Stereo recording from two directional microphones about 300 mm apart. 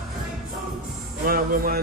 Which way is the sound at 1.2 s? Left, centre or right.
Right.